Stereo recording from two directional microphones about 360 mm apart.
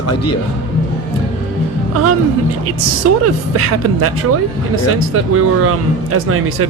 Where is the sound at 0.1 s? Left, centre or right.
Left.